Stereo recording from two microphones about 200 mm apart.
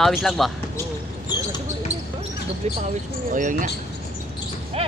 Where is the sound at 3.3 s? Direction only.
40° right (ahead or behind).